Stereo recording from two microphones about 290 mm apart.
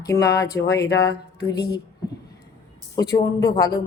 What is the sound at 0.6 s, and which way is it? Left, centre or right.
Speech, left.